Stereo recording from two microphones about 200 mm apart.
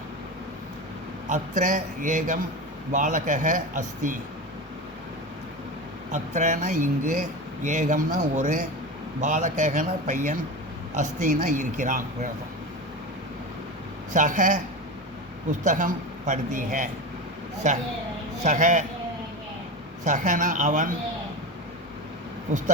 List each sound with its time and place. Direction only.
1.3 s speech: 40° right (ahead or behind)
6.1 s speech: 35° right (ahead or behind)
14.1 s speech: 40° right (ahead or behind)
20.1 s speech: 40° right (ahead or behind)